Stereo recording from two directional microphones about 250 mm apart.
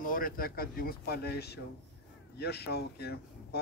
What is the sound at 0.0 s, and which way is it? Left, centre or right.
Speech, left.